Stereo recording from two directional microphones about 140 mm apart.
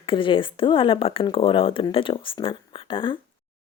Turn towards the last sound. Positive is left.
turn(degrees=35)  # may be behind; listen again after turning